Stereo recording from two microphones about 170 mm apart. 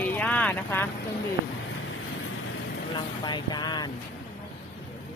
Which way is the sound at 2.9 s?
25° left (ahead or behind).